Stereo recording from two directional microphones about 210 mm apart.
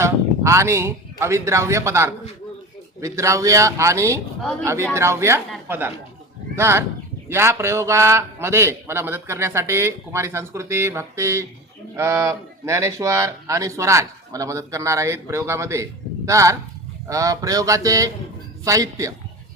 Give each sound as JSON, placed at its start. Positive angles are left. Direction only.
{"t": 0.0, "sound": "speech", "side_deg": -15}